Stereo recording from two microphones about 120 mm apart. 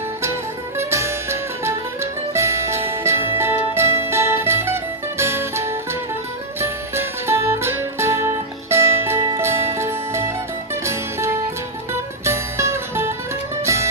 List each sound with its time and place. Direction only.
0.2 s music: 20° right (ahead or behind)